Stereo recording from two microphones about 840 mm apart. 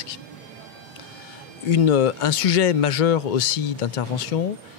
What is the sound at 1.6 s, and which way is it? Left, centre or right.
Speech, left.